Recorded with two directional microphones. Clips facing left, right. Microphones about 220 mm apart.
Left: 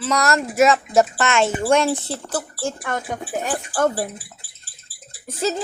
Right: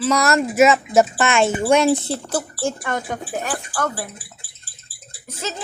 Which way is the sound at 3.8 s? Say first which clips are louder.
Left 6 dB; 30° left (ahead or behind).